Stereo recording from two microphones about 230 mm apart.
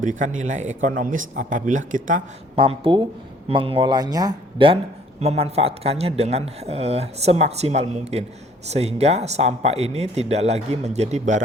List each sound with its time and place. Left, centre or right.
0.0 s speech: right
2.6 s speech: right